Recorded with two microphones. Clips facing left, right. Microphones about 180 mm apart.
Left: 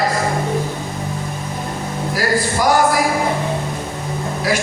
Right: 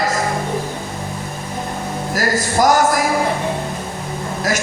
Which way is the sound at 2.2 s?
45° right (ahead or behind).